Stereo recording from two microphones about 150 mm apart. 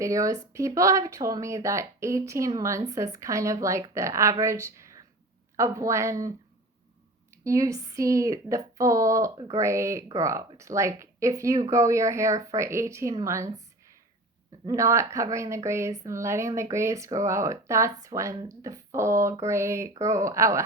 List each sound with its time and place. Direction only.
0.0 s speech: 20° right (ahead or behind)
7.4 s speech: 20° right (ahead or behind)
14.7 s speech: 20° right (ahead or behind)